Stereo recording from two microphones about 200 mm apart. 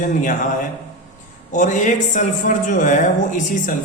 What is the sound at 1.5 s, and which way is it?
Speech, 40° left (ahead or behind).